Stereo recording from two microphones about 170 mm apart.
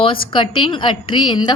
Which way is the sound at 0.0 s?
30° left (ahead or behind).